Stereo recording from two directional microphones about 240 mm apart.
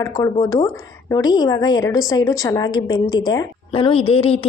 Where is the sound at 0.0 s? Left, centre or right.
Centre.